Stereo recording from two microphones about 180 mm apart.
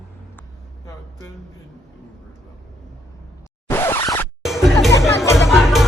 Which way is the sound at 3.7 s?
15° left (ahead or behind).